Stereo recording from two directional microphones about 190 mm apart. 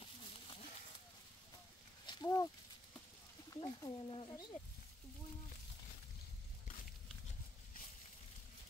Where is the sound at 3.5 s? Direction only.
20° left (ahead or behind).